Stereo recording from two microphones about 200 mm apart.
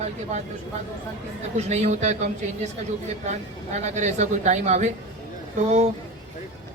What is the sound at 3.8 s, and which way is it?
Music, 35° right (ahead or behind).